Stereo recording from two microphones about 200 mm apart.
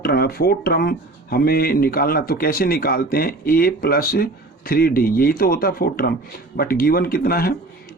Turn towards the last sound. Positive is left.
turn(degrees=50)  # may be behind; listen again after turning